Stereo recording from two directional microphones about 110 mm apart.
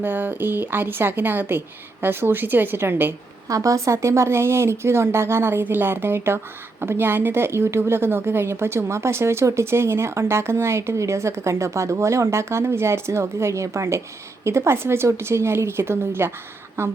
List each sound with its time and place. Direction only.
0.0 s a woman's voice: 15° right (ahead or behind)
3.5 s a woman's voice: 30° right (ahead or behind)